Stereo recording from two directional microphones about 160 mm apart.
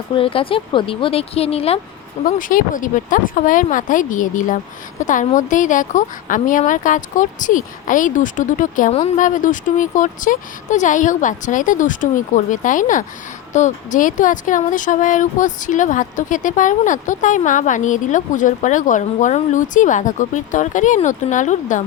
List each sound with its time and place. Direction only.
0.1 s speech: 35° left (ahead or behind)
2.2 s speech: 60° left (ahead or behind)